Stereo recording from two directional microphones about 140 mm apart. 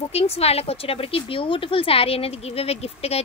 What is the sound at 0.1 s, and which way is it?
Speech, 45° left (ahead or behind).